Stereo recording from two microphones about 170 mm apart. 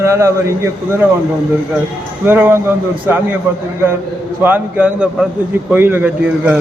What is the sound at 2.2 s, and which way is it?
Speech, 10° right (ahead or behind).